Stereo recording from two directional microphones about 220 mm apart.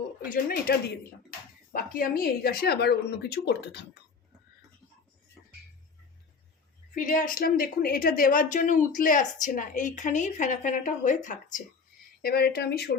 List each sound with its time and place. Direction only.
0.3 s speech: 45° left (ahead or behind)
6.9 s a woman's voice: 40° left (ahead or behind)
12.2 s speech: 45° left (ahead or behind)